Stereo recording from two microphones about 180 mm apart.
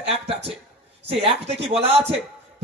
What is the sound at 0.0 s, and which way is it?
Speech, 35° right (ahead or behind).